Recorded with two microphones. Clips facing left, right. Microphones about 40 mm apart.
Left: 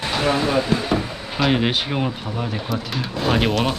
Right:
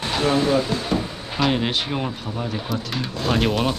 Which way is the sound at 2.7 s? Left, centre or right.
Centre.